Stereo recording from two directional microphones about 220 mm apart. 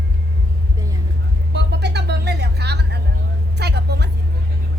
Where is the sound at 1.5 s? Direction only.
50° right (ahead or behind).